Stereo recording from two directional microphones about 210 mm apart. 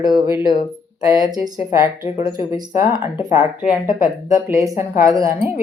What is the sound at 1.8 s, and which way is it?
Speech, 25° left (ahead or behind).